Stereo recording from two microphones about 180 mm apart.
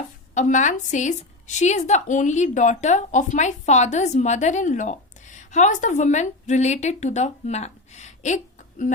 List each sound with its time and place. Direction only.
0.3 s a woman's voice: 45° left (ahead or behind)